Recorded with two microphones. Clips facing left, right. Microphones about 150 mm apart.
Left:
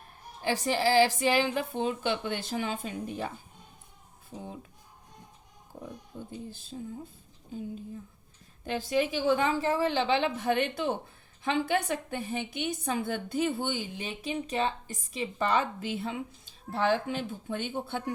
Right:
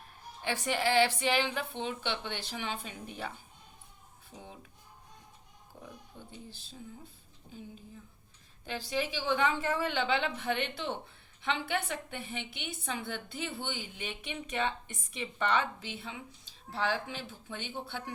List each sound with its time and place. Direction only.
0.4 s a woman's voice: 35° left (ahead or behind)
5.8 s speech: 45° left (ahead or behind)
8.6 s a woman's voice: 45° left (ahead or behind)